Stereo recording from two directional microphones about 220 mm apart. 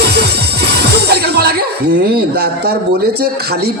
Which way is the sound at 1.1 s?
45° right (ahead or behind).